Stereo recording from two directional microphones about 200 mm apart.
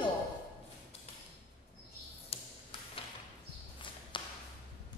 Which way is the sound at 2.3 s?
30° left (ahead or behind).